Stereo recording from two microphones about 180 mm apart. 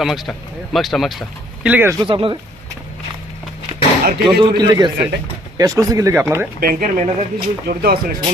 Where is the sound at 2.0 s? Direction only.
30° right (ahead or behind).